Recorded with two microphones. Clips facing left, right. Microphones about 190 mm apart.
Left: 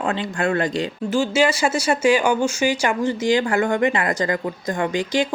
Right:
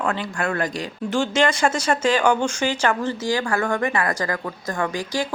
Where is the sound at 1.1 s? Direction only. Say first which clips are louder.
Left 1 dB; 5° left (ahead or behind).